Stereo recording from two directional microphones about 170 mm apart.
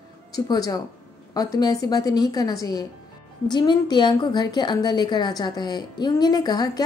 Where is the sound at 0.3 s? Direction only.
20° left (ahead or behind).